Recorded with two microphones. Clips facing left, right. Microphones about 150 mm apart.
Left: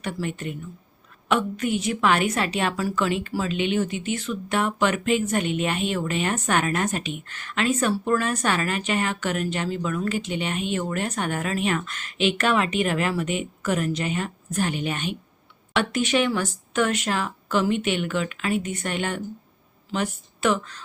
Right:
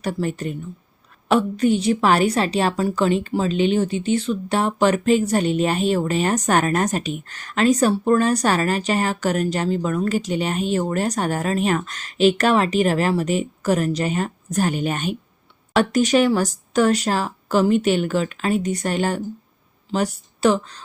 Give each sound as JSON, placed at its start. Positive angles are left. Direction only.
{"t": 0.0, "sound": "a woman's voice", "side_deg": -35}